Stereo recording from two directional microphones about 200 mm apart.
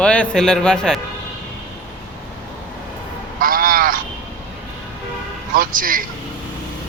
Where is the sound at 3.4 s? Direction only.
45° right (ahead or behind).